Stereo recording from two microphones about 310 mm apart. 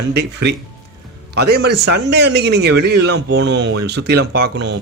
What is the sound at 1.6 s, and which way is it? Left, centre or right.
A man's voice, right.